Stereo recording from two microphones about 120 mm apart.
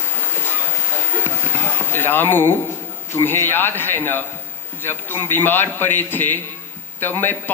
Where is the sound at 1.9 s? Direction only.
15° left (ahead or behind).